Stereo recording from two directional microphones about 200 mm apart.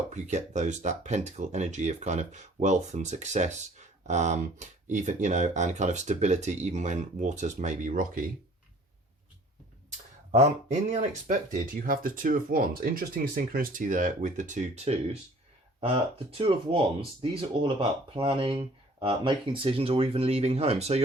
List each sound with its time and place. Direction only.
0.1 s speech: 35° right (ahead or behind)
11.3 s speech: 45° right (ahead or behind)